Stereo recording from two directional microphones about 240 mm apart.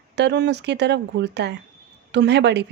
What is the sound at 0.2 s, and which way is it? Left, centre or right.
Speech, right.